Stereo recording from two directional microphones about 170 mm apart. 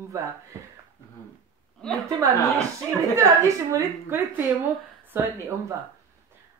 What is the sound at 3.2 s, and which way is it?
Speech, 20° right (ahead or behind).